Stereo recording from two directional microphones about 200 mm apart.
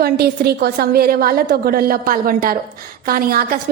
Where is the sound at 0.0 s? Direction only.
50° right (ahead or behind).